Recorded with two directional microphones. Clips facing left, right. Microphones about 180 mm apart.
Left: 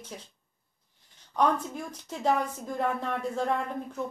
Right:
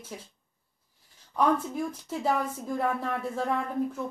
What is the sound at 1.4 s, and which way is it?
Speech, 5° right (ahead or behind).